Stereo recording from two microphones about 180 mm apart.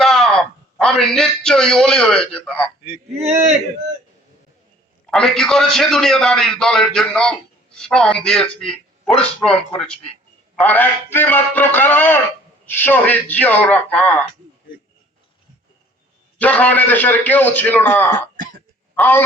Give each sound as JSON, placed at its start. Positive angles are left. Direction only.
{"t": 0.0, "sound": "a man's voice", "side_deg": 0}
{"t": 3.2, "sound": "speech", "side_deg": -35}
{"t": 5.1, "sound": "a man's voice", "side_deg": 0}
{"t": 16.4, "sound": "a man's voice", "side_deg": 10}